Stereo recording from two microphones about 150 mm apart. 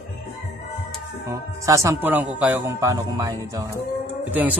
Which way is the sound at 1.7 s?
20° right (ahead or behind).